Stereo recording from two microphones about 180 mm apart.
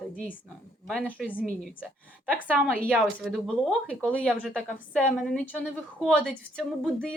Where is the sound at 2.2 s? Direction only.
5° left (ahead or behind).